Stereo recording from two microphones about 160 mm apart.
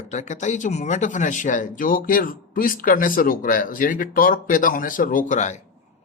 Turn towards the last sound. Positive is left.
turn(degrees=50)  # may be behind; listen again after turning